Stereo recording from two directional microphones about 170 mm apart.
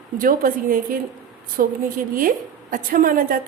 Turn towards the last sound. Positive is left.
turn(degrees=-55)  # may be behind; listen again after turning